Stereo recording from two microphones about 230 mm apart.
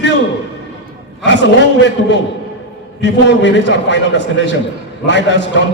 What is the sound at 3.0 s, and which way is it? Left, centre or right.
A man's voice, left.